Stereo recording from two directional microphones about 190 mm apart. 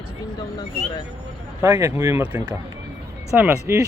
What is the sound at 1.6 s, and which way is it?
Speech, 20° right (ahead or behind).